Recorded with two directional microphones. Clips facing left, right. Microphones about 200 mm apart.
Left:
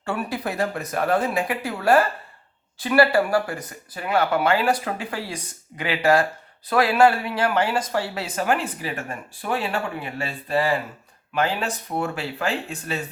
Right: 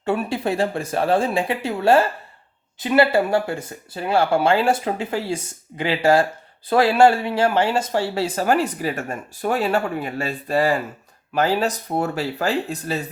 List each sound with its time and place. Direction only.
0.0 s speech: 25° right (ahead or behind)